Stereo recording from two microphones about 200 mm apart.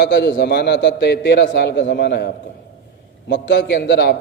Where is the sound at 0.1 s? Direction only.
60° left (ahead or behind).